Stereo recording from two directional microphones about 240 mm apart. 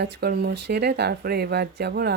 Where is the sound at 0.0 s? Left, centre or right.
Right.